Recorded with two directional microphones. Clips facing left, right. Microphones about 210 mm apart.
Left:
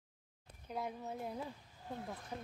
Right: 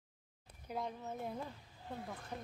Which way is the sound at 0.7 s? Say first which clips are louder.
Even; centre (ahead or behind).